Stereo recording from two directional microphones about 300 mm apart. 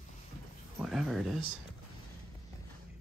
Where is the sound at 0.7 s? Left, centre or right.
Centre.